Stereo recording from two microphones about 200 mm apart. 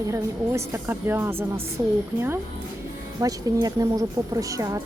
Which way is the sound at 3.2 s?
20° right (ahead or behind).